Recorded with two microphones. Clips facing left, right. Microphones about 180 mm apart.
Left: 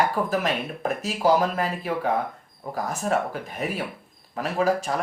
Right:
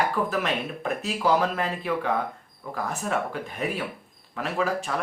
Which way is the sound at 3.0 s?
40° left (ahead or behind).